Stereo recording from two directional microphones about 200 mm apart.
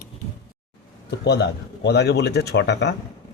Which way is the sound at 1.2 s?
60° left (ahead or behind).